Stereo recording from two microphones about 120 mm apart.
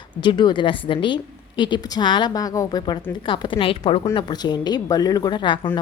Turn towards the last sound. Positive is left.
turn(degrees=40)  # may be behind; listen again after turning